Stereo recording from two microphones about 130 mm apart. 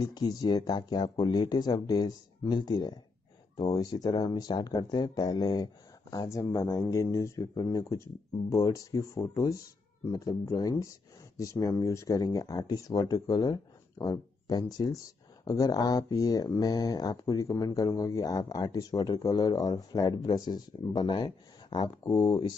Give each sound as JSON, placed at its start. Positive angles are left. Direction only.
{"t": 0.0, "sound": "speech", "side_deg": 30}